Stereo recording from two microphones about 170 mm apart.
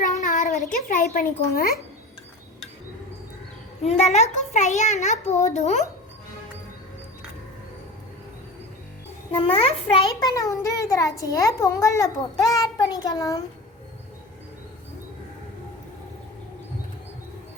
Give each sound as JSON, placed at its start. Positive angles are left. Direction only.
{"t": 0.0, "sound": "a sound", "side_deg": 45}
{"t": 0.7, "sound": "speech", "side_deg": 50}
{"t": 3.8, "sound": "a child's voice", "side_deg": 40}
{"t": 9.3, "sound": "a child's voice", "side_deg": 35}
{"t": 10.2, "sound": "a child's voice", "side_deg": 20}